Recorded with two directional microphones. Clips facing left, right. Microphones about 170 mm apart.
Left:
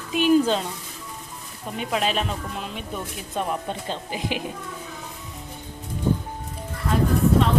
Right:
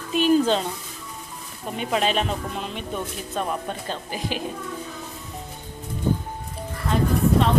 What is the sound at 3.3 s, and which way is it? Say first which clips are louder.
Speech: left 1 dB; 15° left (ahead or behind).